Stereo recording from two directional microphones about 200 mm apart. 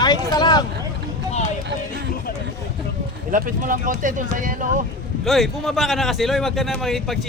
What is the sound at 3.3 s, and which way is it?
Speech, 40° right (ahead or behind).